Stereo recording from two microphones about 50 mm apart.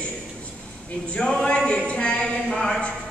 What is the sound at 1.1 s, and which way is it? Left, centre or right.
A man's voice, centre.